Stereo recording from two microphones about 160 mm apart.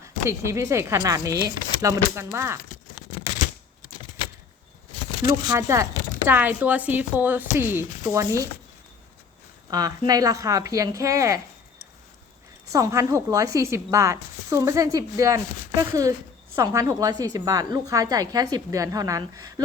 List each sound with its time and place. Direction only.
0.3 s speech: 20° right (ahead or behind)
5.2 s a woman's voice: 20° right (ahead or behind)
9.6 s a woman's voice: 25° right (ahead or behind)
12.7 s a woman's voice: 20° right (ahead or behind)